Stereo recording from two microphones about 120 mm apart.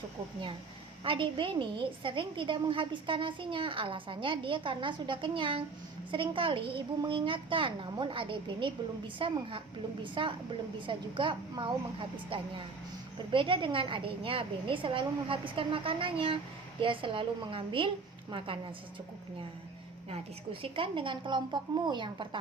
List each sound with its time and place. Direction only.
1.0 s a woman's voice: 45° right (ahead or behind)
20.1 s a woman's voice: 50° right (ahead or behind)